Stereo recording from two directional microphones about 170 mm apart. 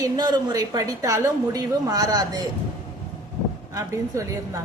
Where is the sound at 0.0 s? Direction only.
25° right (ahead or behind).